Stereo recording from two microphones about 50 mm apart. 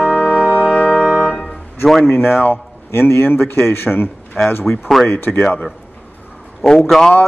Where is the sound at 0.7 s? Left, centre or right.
Centre.